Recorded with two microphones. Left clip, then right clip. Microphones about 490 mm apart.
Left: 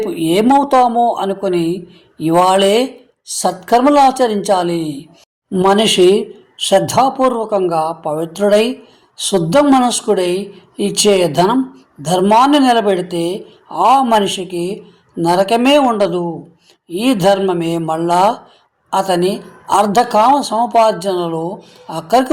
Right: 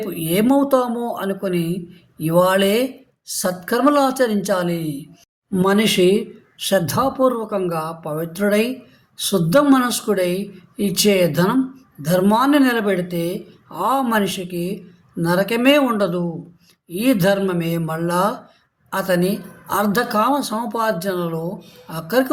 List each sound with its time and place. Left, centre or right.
0.0 s a woman's voice: right